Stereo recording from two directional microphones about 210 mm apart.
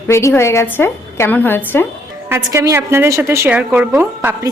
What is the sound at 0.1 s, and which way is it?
A woman's voice, 15° left (ahead or behind).